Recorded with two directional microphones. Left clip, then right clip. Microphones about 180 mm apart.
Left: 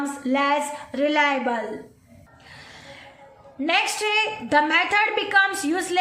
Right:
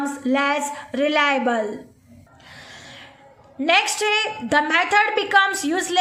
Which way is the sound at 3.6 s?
20° right (ahead or behind).